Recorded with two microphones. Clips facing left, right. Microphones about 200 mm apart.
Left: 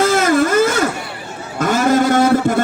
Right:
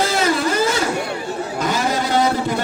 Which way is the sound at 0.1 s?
50° left (ahead or behind).